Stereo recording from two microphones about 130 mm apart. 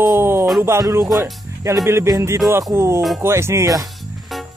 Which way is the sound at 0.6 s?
20° right (ahead or behind).